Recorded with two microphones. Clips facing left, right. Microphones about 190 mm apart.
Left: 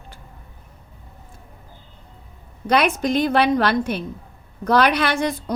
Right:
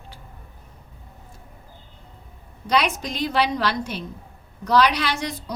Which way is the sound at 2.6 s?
55° left (ahead or behind).